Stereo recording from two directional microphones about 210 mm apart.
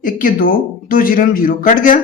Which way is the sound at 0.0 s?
40° left (ahead or behind).